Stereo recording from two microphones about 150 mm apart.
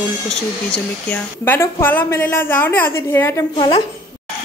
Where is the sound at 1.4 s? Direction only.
15° left (ahead or behind).